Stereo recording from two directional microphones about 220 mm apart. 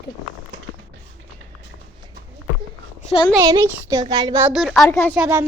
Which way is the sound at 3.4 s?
15° right (ahead or behind).